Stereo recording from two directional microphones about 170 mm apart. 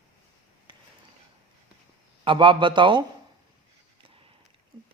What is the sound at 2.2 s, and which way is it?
Speech, 30° right (ahead or behind).